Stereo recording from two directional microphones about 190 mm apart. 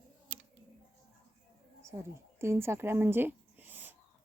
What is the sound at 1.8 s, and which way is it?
Speech, 15° right (ahead or behind).